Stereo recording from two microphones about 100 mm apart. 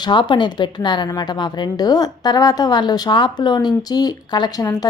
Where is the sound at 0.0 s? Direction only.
50° left (ahead or behind).